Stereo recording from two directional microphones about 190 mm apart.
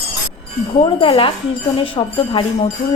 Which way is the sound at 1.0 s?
30° left (ahead or behind).